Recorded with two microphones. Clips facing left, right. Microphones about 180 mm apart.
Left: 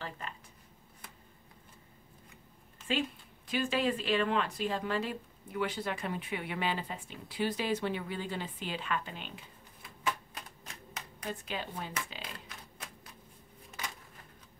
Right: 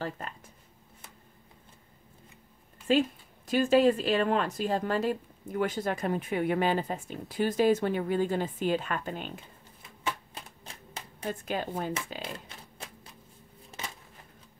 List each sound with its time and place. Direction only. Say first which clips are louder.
2.9 s speech: right 8 dB; 40° right (ahead or behind)
10.0 s typewriter: right 1 dB; 30° right (ahead or behind)
11.2 s speech: right 6 dB; 45° right (ahead or behind)
12.4 s oink: right 3 dB; 30° right (ahead or behind)
13.7 s a sound: right 2 dB; 25° right (ahead or behind)